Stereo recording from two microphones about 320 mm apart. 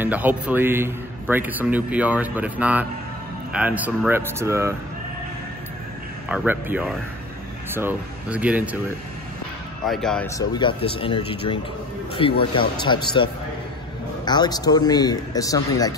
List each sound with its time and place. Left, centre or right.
0.0 s a man's voice: centre
6.2 s a man's voice: centre
9.8 s speech: centre
14.2 s speech: centre